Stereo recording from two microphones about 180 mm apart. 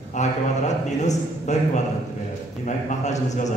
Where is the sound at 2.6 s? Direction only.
40° left (ahead or behind).